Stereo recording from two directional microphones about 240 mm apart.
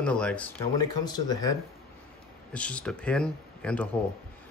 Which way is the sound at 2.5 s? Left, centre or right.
Centre.